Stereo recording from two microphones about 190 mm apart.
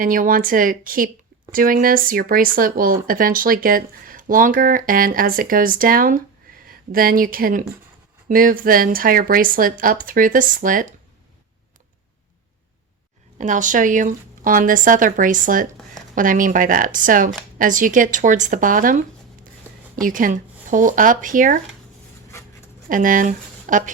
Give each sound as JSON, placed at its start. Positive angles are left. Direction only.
{"t": 0.0, "sound": "speech", "side_deg": -45}
{"t": 13.4, "sound": "speech", "side_deg": -40}
{"t": 22.3, "sound": "pant", "side_deg": 15}
{"t": 22.9, "sound": "speech", "side_deg": -45}